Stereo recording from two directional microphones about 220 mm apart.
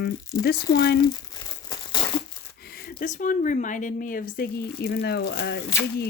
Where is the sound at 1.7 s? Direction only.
20° left (ahead or behind).